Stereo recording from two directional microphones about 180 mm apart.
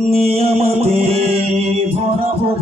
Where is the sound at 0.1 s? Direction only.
35° right (ahead or behind).